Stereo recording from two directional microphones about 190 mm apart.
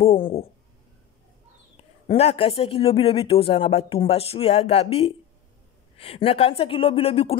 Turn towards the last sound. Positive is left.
turn(degrees=30)  # may be behind; listen again after turning